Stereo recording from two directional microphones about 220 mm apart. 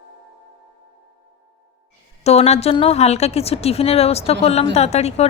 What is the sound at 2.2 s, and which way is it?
A woman's voice, 30° left (ahead or behind).